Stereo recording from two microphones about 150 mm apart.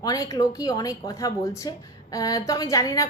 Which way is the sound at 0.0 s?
25° left (ahead or behind).